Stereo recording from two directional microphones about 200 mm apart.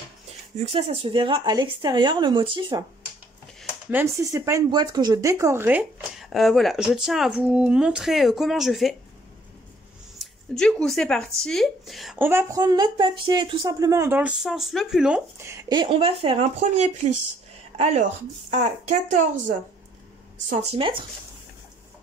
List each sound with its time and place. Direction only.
0.6 s speech: 30° right (ahead or behind)
3.8 s speech: 10° right (ahead or behind)
10.1 s speech: 5° left (ahead or behind); by 17.1 s 35° right (ahead or behind)
18.5 s speech: 35° right (ahead or behind)
20.4 s speech: 35° right (ahead or behind)